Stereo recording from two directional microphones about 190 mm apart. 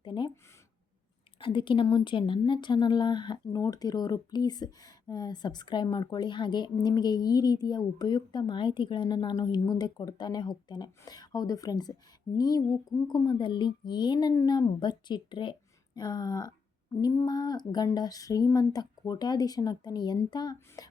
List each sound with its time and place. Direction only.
0.0 s speech: 25° left (ahead or behind)
1.4 s speech: 25° left (ahead or behind)